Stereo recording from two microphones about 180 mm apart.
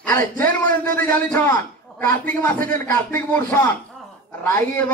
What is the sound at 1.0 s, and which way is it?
A man's voice, 10° left (ahead or behind).